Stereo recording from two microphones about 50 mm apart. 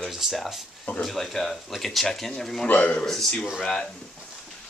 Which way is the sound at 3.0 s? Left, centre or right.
Centre.